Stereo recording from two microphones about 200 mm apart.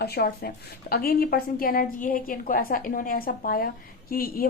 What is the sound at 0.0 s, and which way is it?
A woman's voice, 50° left (ahead or behind).